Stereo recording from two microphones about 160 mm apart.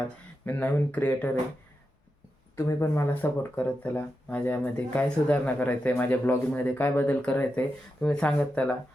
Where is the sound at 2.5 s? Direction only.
20° left (ahead or behind).